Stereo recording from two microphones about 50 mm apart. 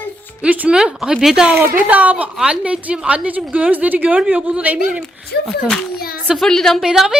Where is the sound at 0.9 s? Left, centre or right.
Centre.